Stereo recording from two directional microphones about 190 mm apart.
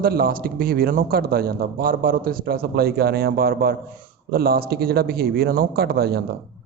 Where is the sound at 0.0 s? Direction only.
50° right (ahead or behind).